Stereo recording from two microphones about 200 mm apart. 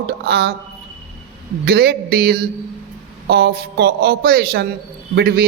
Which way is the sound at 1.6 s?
55° right (ahead or behind).